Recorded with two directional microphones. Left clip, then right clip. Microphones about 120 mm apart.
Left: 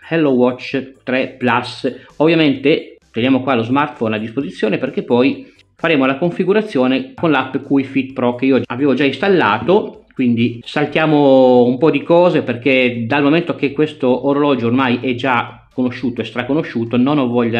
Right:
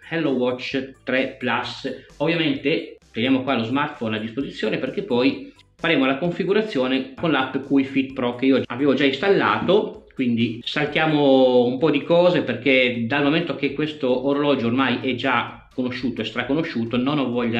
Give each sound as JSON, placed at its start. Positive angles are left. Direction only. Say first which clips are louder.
{"t": 0.4, "sound": "speech", "louder": "left 7 dB", "side_deg": 30}